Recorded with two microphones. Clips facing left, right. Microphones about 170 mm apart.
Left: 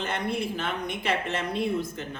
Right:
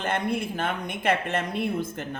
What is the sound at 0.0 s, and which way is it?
Speech, 50° right (ahead or behind).